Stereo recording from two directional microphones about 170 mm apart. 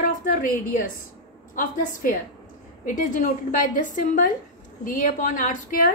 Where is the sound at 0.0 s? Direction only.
55° left (ahead or behind).